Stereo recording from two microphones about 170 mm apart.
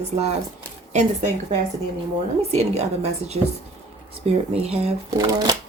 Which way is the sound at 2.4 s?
40° right (ahead or behind).